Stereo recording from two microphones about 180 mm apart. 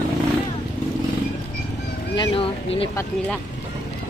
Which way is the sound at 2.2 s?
30° left (ahead or behind).